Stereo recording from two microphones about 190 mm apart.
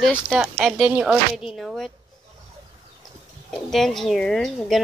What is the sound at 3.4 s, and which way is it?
Speech, centre (ahead or behind).